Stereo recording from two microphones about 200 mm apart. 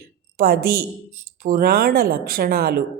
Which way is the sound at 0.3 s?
50° right (ahead or behind).